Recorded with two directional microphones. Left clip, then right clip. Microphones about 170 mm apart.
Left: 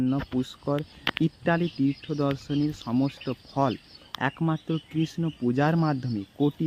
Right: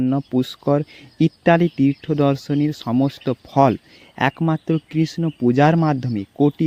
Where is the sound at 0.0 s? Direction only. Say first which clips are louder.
Right 7 dB; 35° right (ahead or behind).